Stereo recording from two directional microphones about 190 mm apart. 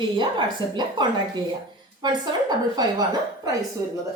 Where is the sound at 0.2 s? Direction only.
25° right (ahead or behind).